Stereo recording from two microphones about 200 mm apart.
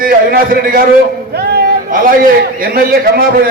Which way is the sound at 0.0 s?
45° right (ahead or behind).